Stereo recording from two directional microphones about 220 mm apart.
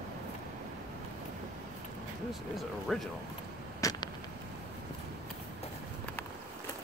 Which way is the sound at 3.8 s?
20° left (ahead or behind).